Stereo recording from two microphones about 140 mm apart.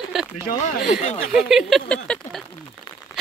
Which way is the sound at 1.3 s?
5° right (ahead or behind).